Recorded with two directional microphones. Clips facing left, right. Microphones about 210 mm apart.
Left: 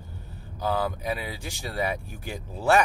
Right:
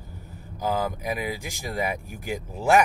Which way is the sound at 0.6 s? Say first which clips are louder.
Right 1 dB; 15° right (ahead or behind).